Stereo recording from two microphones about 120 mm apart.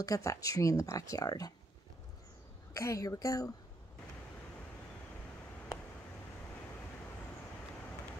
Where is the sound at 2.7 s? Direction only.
25° left (ahead or behind).